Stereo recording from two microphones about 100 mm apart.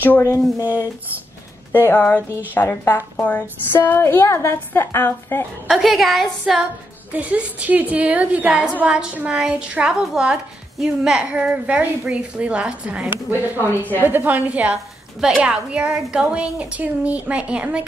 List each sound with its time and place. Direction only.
0.0 s speech: 20° left (ahead or behind)
1.7 s speech: 20° left (ahead or behind)
5.7 s a woman's voice: 5° right (ahead or behind)
7.1 s a woman's voice: 15° right (ahead or behind)